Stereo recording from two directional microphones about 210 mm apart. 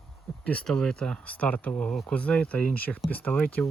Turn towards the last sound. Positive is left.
turn(degrees=5)  # may be behind; listen again after turning